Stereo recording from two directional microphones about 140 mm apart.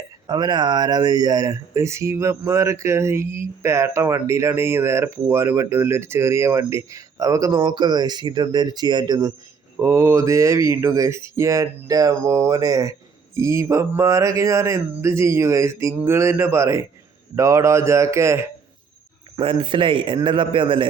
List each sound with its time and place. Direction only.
0.3 s speech: 30° right (ahead or behind)
9.7 s speech: 20° right (ahead or behind)
19.4 s speech: 40° right (ahead or behind)